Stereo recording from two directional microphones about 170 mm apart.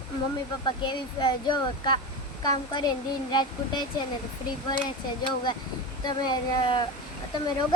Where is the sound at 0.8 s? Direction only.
25° left (ahead or behind).